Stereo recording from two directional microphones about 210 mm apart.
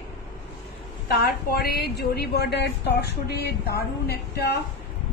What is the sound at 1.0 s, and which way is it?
A woman's voice, 45° left (ahead or behind).